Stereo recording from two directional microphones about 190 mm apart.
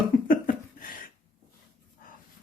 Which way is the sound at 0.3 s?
45° left (ahead or behind).